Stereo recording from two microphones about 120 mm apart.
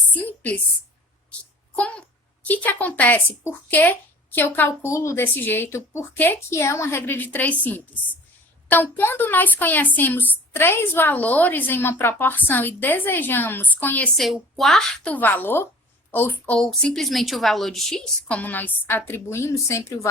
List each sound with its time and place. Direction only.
0.1 s a woman's voice: 10° left (ahead or behind)
1.7 s speech: 10° left (ahead or behind)
14.2 s a woman's voice: centre (ahead or behind); by 20.1 s 25° left (ahead or behind)